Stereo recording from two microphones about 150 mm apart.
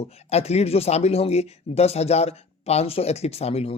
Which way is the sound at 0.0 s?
45° left (ahead or behind).